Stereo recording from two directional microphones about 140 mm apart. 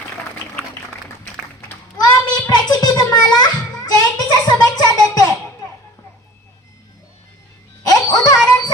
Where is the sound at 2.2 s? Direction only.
30° left (ahead or behind).